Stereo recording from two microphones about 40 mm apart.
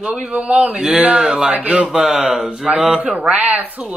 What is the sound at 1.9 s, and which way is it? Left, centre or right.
Speech, centre.